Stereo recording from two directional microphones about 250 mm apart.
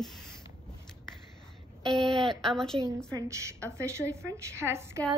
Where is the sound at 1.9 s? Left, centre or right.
Centre.